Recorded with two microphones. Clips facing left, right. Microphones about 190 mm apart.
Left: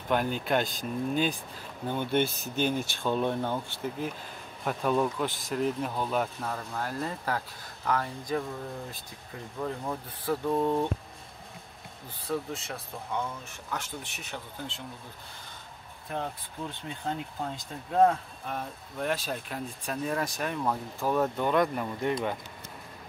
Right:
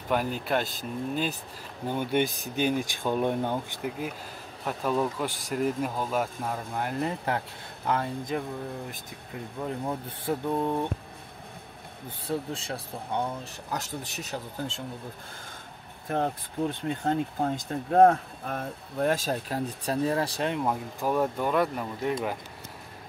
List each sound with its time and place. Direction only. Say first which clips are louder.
0.1 s speech: even; 5° right (ahead or behind)
1.9 s speech: right 1 dB; 10° right (ahead or behind)
9.6 s speech: right 1 dB; 25° right (ahead or behind)
10.5 s speech: left 2 dB; 15° right (ahead or behind)
12.3 s speech: right 1 dB; 30° right (ahead or behind)
16.1 s speech: right 6 dB; 55° right (ahead or behind); by 20.5 s 30° right (ahead or behind)
20.5 s speech: right 2 dB; 15° right (ahead or behind)